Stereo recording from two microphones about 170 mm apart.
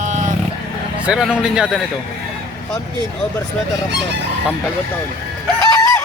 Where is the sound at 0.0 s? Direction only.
45° right (ahead or behind).